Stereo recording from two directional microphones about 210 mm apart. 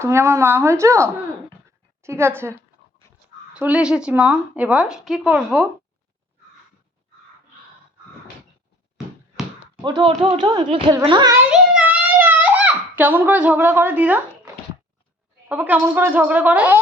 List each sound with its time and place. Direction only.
0.0 s a woman's voice: 15° right (ahead or behind)
9.8 s speech: 20° right (ahead or behind)
11.4 s a sound: 5° right (ahead or behind)
15.4 s speech: 5° right (ahead or behind)